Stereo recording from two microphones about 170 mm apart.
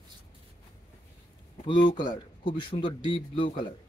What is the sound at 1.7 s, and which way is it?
Speech, 30° left (ahead or behind).